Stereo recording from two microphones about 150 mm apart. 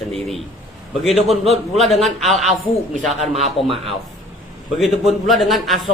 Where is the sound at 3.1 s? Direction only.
45° right (ahead or behind).